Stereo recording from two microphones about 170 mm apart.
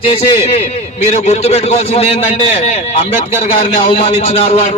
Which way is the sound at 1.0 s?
40° left (ahead or behind).